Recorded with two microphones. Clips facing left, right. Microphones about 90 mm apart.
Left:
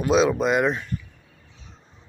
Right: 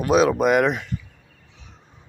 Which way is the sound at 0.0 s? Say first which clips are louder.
Right 2 dB; 55° right (ahead or behind).